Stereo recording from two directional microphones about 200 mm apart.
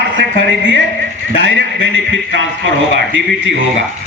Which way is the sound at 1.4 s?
70° right (ahead or behind).